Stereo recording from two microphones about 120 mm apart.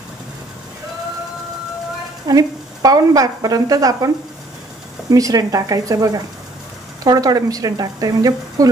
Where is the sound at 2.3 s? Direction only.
30° right (ahead or behind).